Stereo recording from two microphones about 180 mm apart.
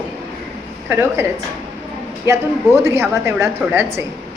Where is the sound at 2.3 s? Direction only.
15° right (ahead or behind).